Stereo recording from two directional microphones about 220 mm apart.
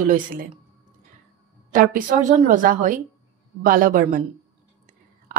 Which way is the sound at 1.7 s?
35° right (ahead or behind).